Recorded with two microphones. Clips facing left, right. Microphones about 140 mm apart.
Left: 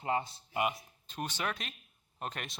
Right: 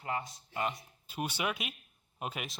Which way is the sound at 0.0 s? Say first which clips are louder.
Left 4 dB; 25° left (ahead or behind).